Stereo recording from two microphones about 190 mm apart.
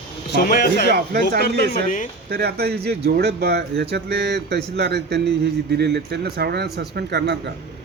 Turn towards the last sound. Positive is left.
turn(degrees=-60)  # may be behind; listen again after turning